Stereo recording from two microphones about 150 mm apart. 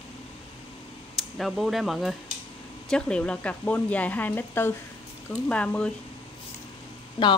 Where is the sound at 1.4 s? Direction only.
Centre (ahead or behind).